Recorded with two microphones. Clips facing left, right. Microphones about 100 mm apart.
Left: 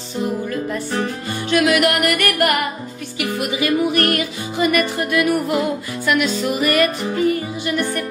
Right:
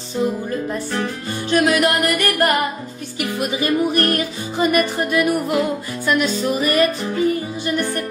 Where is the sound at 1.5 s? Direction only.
30° right (ahead or behind).